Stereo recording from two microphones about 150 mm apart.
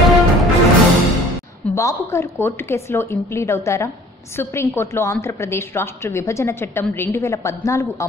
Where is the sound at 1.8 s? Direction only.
20° left (ahead or behind).